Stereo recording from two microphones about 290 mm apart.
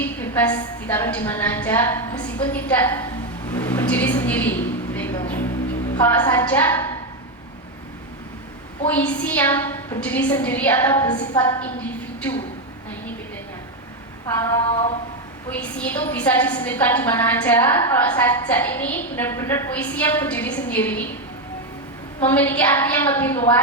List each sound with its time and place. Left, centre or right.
0.0 s a woman's voice: centre
8.9 s a woman's voice: centre
14.3 s a woman's voice: centre
14.7 s a capella: centre
15.4 s a woman's voice: centre
22.2 s a woman's voice: centre